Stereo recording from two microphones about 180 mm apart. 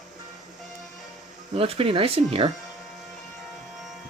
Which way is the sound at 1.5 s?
30° right (ahead or behind).